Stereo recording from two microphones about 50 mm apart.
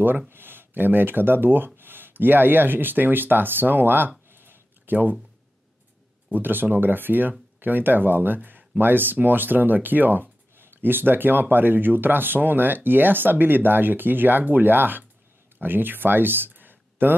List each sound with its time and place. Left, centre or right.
0.3 s speech: right
4.3 s a sound: right
6.3 s speech: right